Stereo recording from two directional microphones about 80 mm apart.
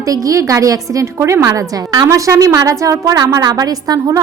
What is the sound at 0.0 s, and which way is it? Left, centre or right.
Speech, right.